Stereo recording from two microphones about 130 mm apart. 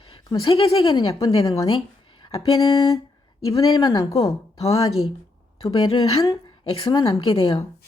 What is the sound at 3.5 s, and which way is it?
Speech, 30° left (ahead or behind).